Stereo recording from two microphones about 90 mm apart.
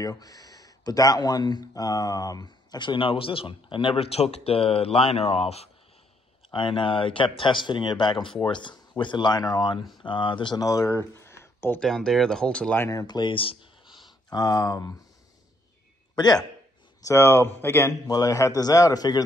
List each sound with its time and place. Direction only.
0.0 s speech: 45° left (ahead or behind); by 5.5 s 90° left
6.5 s speech: 65° left (ahead or behind)
10.6 s speech: 35° left (ahead or behind)
11.8 s speech: 5° left (ahead or behind)
13.0 s speech: 55° left (ahead or behind); by 13.7 s 85° left
13.8 s a sound: centre (ahead or behind)
14.3 s a man's voice: 45° left (ahead or behind)
16.2 s a man's voice: 50° left (ahead or behind)
17.0 s speech: 30° left (ahead or behind)
18.0 s a man's voice: 45° left (ahead or behind)